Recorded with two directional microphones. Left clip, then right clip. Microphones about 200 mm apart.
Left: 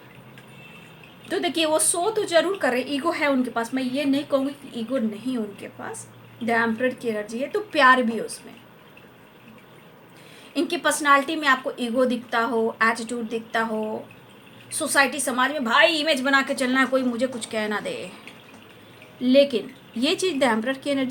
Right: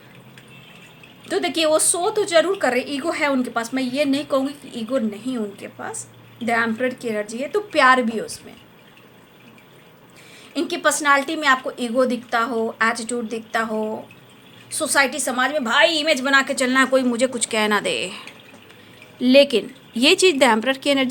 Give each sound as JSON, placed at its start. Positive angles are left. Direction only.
{"t": 1.3, "sound": "a woman's voice", "side_deg": -30}
{"t": 10.5, "sound": "a woman's voice", "side_deg": -25}
{"t": 19.2, "sound": "a woman's voice", "side_deg": -40}